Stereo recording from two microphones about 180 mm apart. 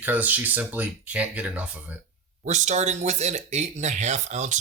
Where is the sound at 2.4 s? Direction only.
40° right (ahead or behind).